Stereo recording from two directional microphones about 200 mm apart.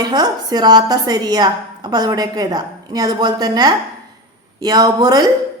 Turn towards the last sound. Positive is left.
turn(degrees=-20)  # may be behind; listen again after turning